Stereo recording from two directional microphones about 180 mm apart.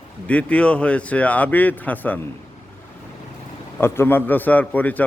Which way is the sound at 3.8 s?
10° left (ahead or behind).